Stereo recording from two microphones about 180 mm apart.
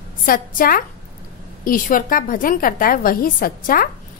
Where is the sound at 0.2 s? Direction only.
50° left (ahead or behind).